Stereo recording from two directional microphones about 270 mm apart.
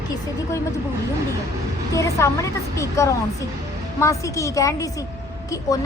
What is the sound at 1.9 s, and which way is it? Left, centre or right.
A woman's voice, centre.